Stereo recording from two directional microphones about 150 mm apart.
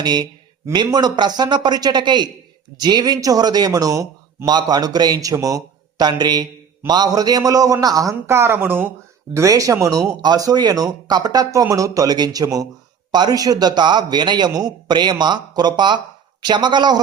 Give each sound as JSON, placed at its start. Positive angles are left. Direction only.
{"t": 0.0, "sound": "speech", "side_deg": -30}